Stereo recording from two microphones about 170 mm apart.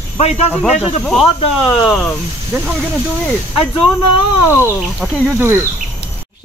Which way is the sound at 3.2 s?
5° left (ahead or behind).